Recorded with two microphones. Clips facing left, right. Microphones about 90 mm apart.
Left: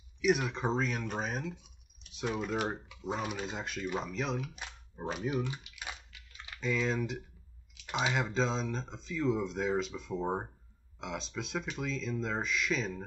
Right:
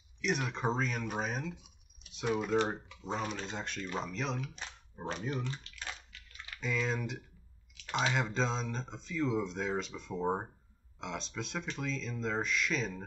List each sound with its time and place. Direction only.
0.2 s speech: 5° left (ahead or behind)
6.6 s speech: centre (ahead or behind)